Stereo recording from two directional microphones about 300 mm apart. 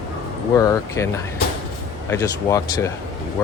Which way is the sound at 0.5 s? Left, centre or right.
Centre.